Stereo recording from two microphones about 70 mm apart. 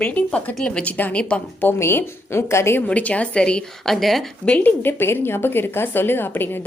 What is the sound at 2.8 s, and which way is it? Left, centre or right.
Speech, centre.